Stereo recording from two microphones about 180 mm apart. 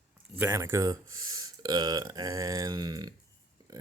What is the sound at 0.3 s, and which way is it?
Speech, 15° right (ahead or behind).